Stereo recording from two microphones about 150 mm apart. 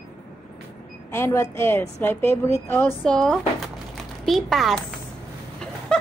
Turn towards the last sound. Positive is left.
turn(degrees=5)  # may be behind; listen again after turning